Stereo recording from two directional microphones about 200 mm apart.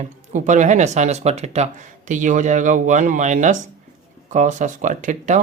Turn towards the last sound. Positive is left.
turn(degrees=-40)  # may be behind; listen again after turning